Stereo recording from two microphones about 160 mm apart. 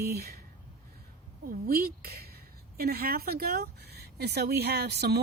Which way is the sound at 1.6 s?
70° right (ahead or behind).